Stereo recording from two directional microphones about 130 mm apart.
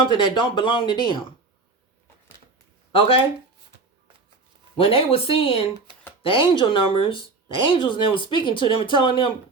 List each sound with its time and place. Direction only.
0.0 s speech: 40° left (ahead or behind)
2.9 s speech: 45° left (ahead or behind)
4.8 s speech: 45° left (ahead or behind)